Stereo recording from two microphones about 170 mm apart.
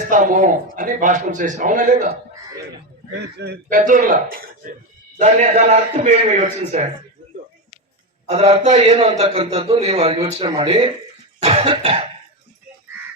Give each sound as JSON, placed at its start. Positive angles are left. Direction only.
{"t": 0.1, "sound": "a man's voice", "side_deg": -50}
{"t": 3.3, "sound": "speech", "side_deg": -75}
{"t": 3.7, "sound": "a man's voice", "side_deg": -50}
{"t": 5.2, "sound": "a man's voice", "side_deg": -40}
{"t": 8.3, "sound": "a man's voice", "side_deg": -35}